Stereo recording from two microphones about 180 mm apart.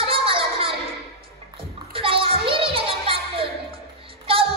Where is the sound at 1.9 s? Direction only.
30° right (ahead or behind).